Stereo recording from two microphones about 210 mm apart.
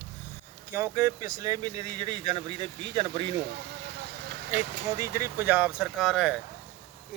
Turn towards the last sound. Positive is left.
turn(degrees=-5)  # may be behind; listen again after turning